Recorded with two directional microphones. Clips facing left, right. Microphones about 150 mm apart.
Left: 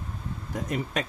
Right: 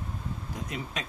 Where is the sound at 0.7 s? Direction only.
50° left (ahead or behind).